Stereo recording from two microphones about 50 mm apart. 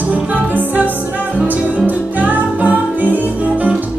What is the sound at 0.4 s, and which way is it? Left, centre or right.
Music, right.